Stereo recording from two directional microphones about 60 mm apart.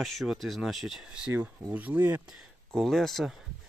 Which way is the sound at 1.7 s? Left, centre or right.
Right.